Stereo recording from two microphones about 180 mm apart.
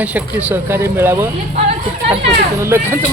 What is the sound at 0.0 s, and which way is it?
A woman's voice, 10° right (ahead or behind).